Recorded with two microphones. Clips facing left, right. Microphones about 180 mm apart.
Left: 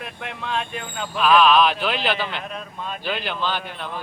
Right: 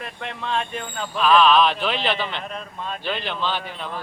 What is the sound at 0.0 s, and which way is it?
Speech, 5° left (ahead or behind).